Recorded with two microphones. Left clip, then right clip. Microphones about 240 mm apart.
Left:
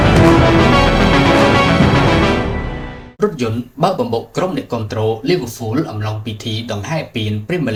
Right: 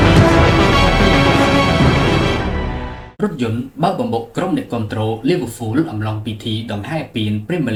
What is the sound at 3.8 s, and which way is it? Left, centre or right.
Speech, left.